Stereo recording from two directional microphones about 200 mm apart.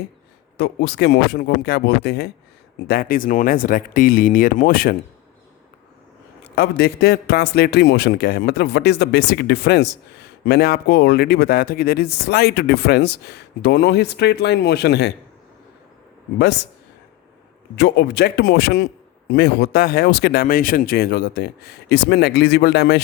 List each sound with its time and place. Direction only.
0.5 s a man's voice: 60° left (ahead or behind)
6.6 s a man's voice: 55° left (ahead or behind)
17.7 s a man's voice: 55° left (ahead or behind)